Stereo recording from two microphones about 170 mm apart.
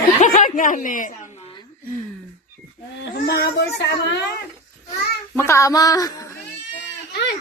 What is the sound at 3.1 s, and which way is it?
Speech, 65° left (ahead or behind).